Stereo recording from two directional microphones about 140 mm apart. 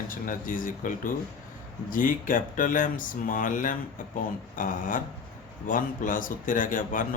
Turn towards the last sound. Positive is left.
turn(degrees=70)  # may be behind; listen again after turning